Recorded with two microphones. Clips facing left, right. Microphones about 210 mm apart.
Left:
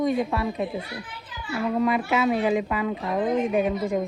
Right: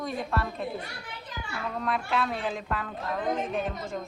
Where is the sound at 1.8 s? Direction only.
Centre (ahead or behind).